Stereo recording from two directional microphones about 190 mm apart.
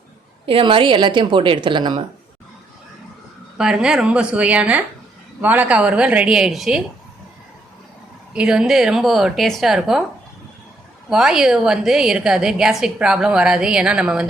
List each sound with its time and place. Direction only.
0.4 s speech: 30° right (ahead or behind)
3.6 s a woman's voice: 5° right (ahead or behind)
8.3 s a woman's voice: 5° right (ahead or behind)
11.1 s a woman's voice: 5° right (ahead or behind)